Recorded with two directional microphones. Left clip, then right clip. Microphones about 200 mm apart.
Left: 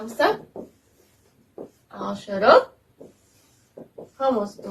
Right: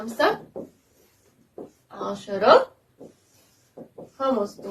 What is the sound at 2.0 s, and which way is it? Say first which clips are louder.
Speech: left 1 dB; 30° right (ahead or behind).